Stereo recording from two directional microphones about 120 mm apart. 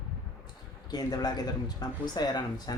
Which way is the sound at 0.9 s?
35° left (ahead or behind).